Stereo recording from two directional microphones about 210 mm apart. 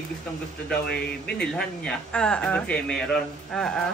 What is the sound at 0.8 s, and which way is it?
Speech, 50° left (ahead or behind).